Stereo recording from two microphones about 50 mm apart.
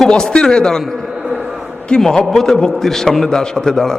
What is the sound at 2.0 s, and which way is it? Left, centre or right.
A man's voice, centre.